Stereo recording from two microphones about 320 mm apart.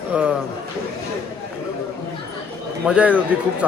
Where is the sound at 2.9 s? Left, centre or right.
Centre.